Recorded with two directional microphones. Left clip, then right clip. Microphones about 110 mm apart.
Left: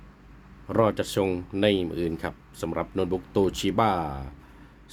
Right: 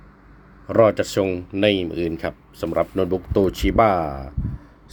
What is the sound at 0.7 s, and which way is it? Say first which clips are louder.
Speech: right 7 dB; centre (ahead or behind).